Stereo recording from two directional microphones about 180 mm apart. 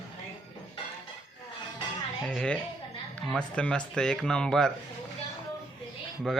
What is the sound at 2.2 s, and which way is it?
Speech, 5° left (ahead or behind).